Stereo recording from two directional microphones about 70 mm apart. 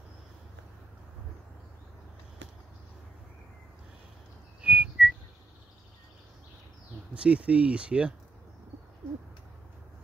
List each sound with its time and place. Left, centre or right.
4.6 s whistling: centre
7.2 s speech: centre